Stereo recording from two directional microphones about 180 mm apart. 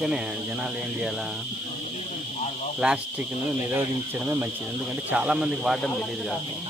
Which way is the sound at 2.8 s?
5° right (ahead or behind).